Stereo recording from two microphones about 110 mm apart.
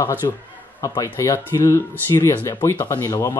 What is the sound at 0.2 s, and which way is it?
Speech, 35° left (ahead or behind).